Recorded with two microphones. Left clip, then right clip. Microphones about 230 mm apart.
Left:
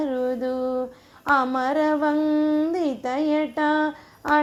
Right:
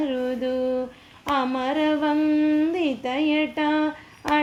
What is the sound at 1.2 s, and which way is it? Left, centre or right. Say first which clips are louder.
Speech: left 3 dB; centre.